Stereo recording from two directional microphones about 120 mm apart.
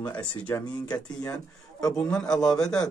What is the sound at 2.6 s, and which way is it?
Speech, 30° left (ahead or behind).